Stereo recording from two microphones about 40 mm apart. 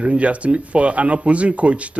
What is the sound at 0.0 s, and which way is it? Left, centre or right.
Speech, right.